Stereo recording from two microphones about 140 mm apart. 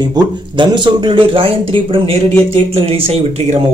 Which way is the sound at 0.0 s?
30° right (ahead or behind).